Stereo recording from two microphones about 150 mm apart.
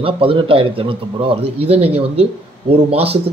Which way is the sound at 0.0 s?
35° right (ahead or behind).